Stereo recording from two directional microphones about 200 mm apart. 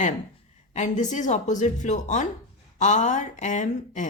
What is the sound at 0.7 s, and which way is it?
A woman's voice, 35° left (ahead or behind).